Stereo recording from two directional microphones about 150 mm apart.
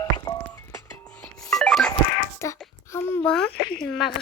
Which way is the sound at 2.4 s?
20° left (ahead or behind).